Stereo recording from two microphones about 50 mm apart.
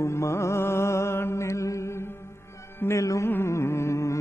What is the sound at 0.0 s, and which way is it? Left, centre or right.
Mantra, left.